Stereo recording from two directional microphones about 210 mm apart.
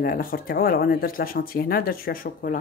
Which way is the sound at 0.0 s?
45° left (ahead or behind).